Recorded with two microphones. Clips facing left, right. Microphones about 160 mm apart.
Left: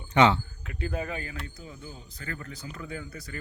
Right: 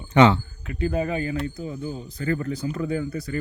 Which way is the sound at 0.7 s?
5° right (ahead or behind).